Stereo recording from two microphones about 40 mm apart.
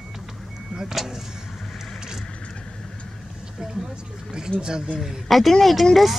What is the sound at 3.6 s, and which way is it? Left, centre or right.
Speech, centre.